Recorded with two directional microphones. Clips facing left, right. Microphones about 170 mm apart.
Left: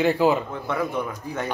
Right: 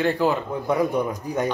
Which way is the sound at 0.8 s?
15° right (ahead or behind).